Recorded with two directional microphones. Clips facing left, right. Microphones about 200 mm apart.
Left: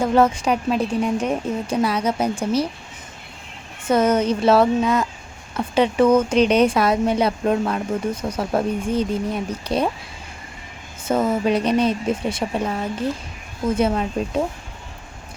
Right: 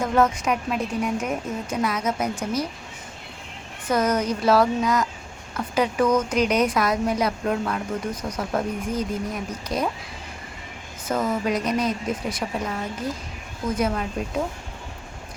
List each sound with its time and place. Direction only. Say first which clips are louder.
0.0 s a woman's voice: left 4 dB; 30° left (ahead or behind)
3.8 s speech: left 5 dB; 25° left (ahead or behind)
11.1 s speech: left 5 dB; 25° left (ahead or behind)